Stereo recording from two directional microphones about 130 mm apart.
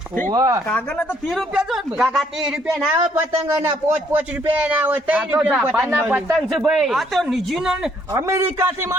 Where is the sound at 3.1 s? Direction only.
20° right (ahead or behind).